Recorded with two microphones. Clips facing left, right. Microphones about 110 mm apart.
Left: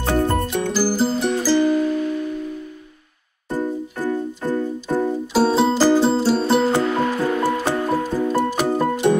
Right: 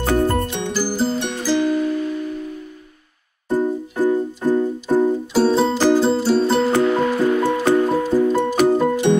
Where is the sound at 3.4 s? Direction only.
15° right (ahead or behind).